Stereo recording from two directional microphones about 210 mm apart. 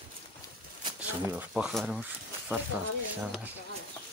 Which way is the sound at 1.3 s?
Centre (ahead or behind).